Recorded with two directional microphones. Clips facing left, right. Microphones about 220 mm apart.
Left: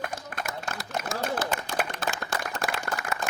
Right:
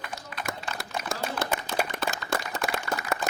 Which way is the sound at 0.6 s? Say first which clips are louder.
Left 2 dB; 50° left (ahead or behind).